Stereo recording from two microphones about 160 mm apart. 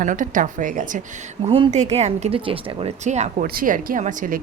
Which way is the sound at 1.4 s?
40° right (ahead or behind).